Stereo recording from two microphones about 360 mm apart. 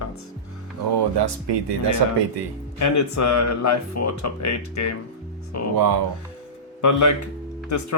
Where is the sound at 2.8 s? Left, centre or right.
Left.